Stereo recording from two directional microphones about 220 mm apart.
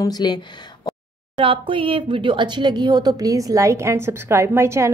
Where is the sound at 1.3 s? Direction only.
25° right (ahead or behind).